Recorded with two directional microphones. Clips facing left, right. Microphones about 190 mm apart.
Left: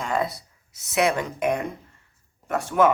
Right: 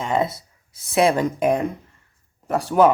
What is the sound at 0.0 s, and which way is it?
Speech, 25° right (ahead or behind).